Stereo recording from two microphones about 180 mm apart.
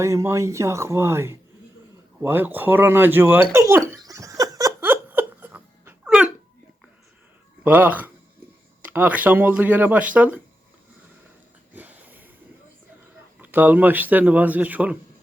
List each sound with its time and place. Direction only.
0.0 s speech: 15° right (ahead or behind)
3.5 s giggle: 15° right (ahead or behind)
7.6 s speech: 10° right (ahead or behind)
11.7 s a sound: 10° right (ahead or behind)
13.4 s speech: 10° right (ahead or behind)